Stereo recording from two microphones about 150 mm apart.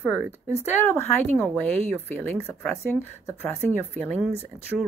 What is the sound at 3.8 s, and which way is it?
Speech, 10° left (ahead or behind).